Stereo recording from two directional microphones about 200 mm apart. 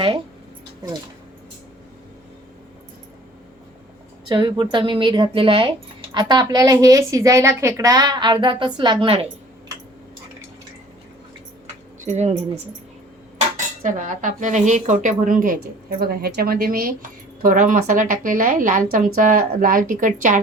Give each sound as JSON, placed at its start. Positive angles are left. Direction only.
{"t": 4.3, "sound": "speech", "side_deg": -20}
{"t": 12.0, "sound": "a woman's voice", "side_deg": -35}
{"t": 13.8, "sound": "a woman's voice", "side_deg": -40}